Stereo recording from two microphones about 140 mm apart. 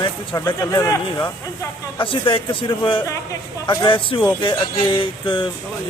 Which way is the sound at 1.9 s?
35° left (ahead or behind).